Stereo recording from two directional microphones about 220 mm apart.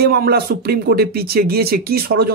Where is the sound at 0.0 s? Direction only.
45° right (ahead or behind).